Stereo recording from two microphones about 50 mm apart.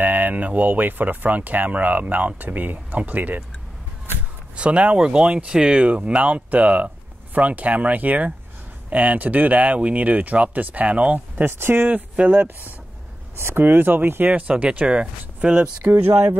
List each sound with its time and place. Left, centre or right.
0.0 s speech: right
4.6 s speech: right
5.9 s speech: right
11.4 s speech: right
11.9 s speech: right
13.4 s speech: right
14.5 s speech: right
15.8 s speech: right